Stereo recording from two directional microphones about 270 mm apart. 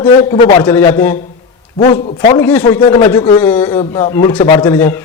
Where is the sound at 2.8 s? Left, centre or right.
Centre.